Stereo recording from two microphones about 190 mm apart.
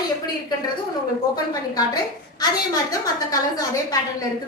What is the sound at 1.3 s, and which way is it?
Speech, 20° left (ahead or behind).